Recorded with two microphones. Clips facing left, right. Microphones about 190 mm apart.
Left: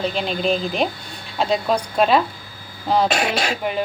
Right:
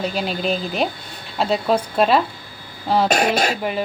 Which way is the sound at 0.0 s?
5° right (ahead or behind).